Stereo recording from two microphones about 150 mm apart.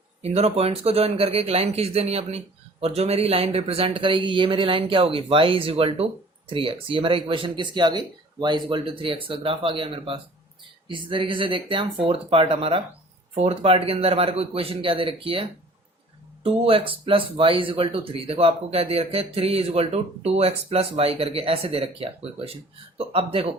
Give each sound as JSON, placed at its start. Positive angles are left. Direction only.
{"t": 0.2, "sound": "speech", "side_deg": -45}